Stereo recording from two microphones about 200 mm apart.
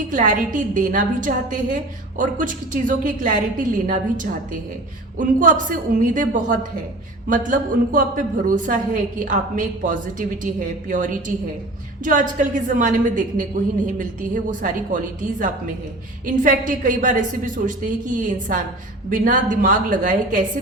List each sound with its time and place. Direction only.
0.1 s a woman's voice: 40° right (ahead or behind)